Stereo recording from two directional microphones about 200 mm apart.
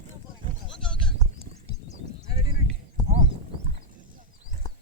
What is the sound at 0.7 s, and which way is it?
Sheep, 5° left (ahead or behind).